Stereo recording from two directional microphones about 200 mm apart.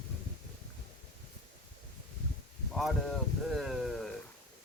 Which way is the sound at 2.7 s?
Centre (ahead or behind).